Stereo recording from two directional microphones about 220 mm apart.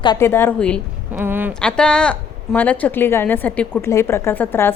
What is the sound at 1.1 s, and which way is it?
Speech, 10° right (ahead or behind).